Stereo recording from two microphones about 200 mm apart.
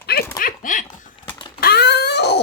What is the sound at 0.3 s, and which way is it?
Dog, 40° left (ahead or behind).